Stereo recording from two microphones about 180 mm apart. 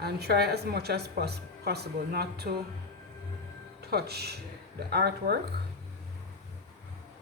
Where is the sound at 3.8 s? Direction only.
60° right (ahead or behind).